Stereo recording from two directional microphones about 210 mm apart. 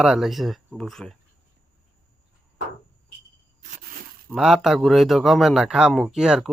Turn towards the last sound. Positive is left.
turn(degrees=-5)  # may be behind; listen again after turning